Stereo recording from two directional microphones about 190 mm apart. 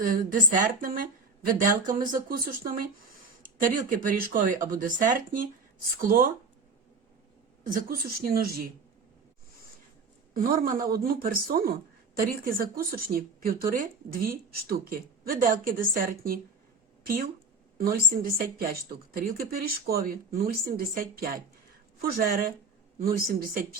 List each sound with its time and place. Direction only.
0.0 s a woman's voice: 45° right (ahead or behind)
7.6 s a woman's voice: 45° right (ahead or behind)
10.3 s a woman's voice: 50° right (ahead or behind)
17.7 s a woman's voice: 50° right (ahead or behind)